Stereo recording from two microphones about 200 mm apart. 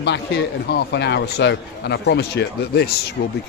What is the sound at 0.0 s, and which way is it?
A man's voice, 55° left (ahead or behind).